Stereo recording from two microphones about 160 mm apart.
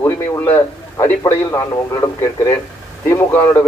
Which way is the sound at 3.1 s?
15° left (ahead or behind).